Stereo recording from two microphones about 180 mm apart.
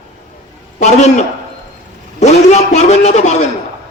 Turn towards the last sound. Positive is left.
turn(degrees=40)  # may be behind; listen again after turning